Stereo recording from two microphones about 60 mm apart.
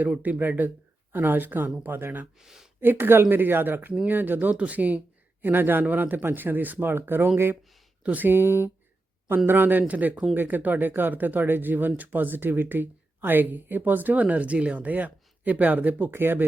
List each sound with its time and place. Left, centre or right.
0.2 s speech: right
2.4 s speech: centre
2.8 s speech: right